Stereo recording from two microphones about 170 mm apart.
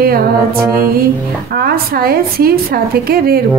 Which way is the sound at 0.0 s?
60° right (ahead or behind).